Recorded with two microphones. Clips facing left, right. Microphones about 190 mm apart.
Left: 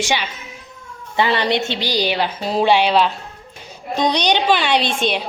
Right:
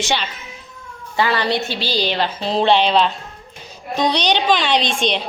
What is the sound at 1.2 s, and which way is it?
A woman's voice, 20° left (ahead or behind).